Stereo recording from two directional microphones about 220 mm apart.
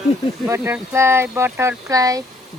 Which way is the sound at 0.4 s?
10° right (ahead or behind).